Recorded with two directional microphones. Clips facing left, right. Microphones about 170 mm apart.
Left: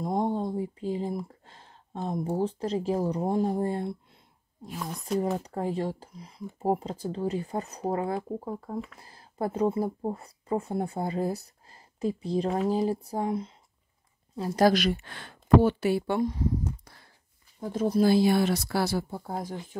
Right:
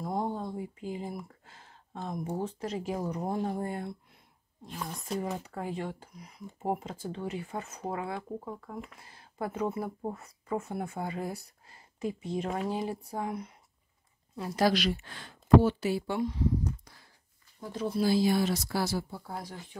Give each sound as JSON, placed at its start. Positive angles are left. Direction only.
{"t": 0.0, "sound": "a sound", "side_deg": 25}
{"t": 2.0, "sound": "speech", "side_deg": 30}
{"t": 5.0, "sound": "speech", "side_deg": 35}
{"t": 14.3, "sound": "speech", "side_deg": 35}
{"t": 16.2, "sound": "a sound", "side_deg": 45}
{"t": 17.6, "sound": "speech", "side_deg": 45}
{"t": 18.1, "sound": "speech", "side_deg": 65}